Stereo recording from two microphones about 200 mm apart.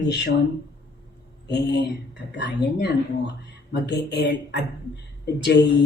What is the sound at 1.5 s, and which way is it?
A woman's voice, 55° left (ahead or behind).